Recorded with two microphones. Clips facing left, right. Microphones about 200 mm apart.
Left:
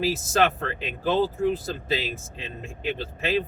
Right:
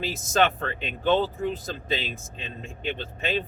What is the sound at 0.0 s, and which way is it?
Speech, 5° left (ahead or behind).